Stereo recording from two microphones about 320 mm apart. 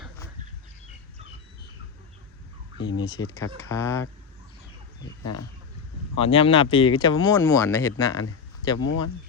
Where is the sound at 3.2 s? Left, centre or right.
Centre.